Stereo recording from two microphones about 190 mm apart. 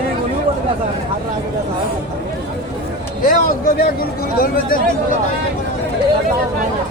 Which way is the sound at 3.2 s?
45° left (ahead or behind).